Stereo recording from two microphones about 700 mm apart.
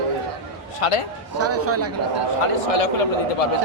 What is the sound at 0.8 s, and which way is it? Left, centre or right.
Speech, left.